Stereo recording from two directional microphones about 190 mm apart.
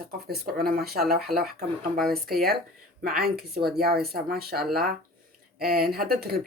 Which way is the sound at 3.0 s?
50° right (ahead or behind).